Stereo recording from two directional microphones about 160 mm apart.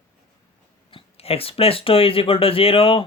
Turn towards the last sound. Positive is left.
turn(degrees=35)  # may be behind; listen again after turning